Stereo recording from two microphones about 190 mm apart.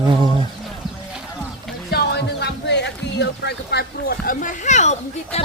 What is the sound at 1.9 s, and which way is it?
Music, 60° left (ahead or behind).